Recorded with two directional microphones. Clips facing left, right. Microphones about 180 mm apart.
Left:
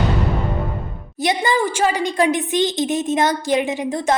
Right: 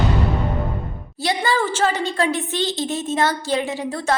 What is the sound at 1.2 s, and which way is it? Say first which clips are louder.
A woman's voice: left 2 dB; 20° left (ahead or behind).